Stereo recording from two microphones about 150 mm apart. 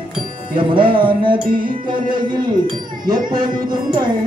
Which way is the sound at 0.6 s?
35° right (ahead or behind).